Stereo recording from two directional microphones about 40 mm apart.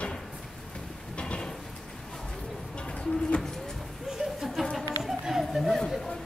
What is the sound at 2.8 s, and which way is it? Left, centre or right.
Bird, left.